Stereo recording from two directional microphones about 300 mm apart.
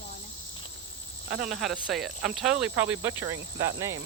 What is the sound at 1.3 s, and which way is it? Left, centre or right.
Speech, centre.